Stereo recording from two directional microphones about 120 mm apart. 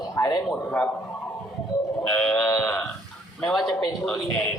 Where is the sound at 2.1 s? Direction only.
10° left (ahead or behind).